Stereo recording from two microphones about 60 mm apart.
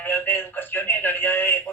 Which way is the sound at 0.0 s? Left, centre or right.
Left.